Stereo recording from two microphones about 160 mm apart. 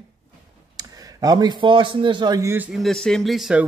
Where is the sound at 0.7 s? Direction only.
20° right (ahead or behind).